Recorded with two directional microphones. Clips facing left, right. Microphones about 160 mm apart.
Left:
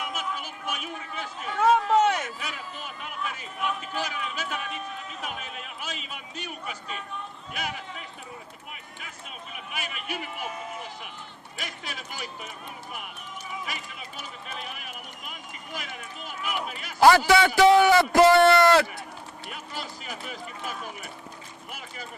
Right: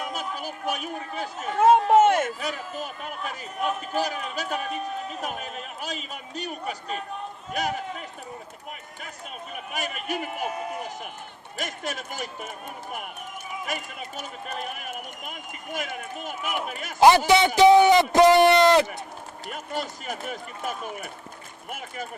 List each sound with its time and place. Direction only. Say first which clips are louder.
0.0 s speech: right 2 dB; 35° right (ahead or behind)
9.7 s speech: right 5 dB; 45° right (ahead or behind)
13.7 s speech: right 5 dB; 45° right (ahead or behind)
17.0 s a man's voice: right 1 dB; 20° right (ahead or behind)
19.5 s speech: right 7 dB; 45° right (ahead or behind)